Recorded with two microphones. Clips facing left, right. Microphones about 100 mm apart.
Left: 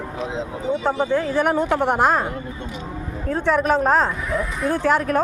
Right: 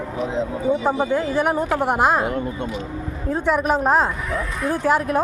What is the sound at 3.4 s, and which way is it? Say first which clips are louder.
Speech: left 1 dB; 5° right (ahead or behind).